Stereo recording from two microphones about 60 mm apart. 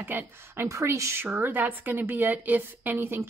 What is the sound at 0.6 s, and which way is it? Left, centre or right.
Speech, right.